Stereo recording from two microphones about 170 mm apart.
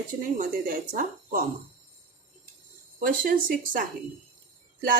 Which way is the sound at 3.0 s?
55° right (ahead or behind).